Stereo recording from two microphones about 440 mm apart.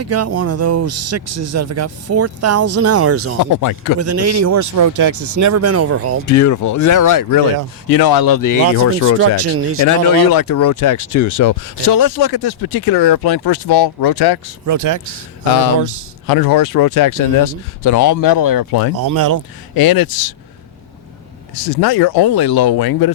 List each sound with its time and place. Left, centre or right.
0.0 s speech: right
3.4 s speech: left
4.0 s speech: right
6.2 s speech: left
9.4 s speech: right
9.8 s speech: left
14.7 s speech: right
16.2 s speech: left
18.9 s speech: right
19.7 s speech: left
21.5 s speech: left